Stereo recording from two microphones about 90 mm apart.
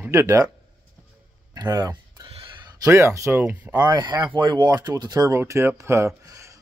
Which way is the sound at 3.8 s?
55° right (ahead or behind).